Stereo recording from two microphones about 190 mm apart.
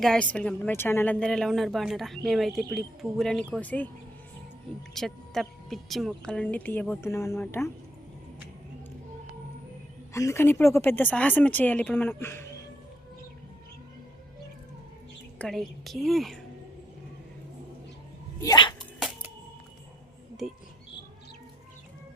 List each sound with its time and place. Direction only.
0.0 s speech: 5° left (ahead or behind)
4.9 s a woman's voice: centre (ahead or behind)
10.1 s a woman's voice: 15° left (ahead or behind)
15.4 s speech: centre (ahead or behind)
18.3 s a sound: 20° left (ahead or behind)
18.9 s a sound: centre (ahead or behind)